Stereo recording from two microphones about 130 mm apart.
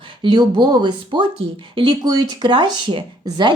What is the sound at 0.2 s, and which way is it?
A woman's voice, 35° right (ahead or behind).